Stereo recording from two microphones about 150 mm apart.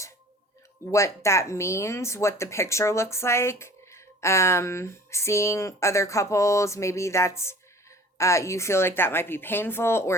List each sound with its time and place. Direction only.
0.9 s speech: 20° left (ahead or behind)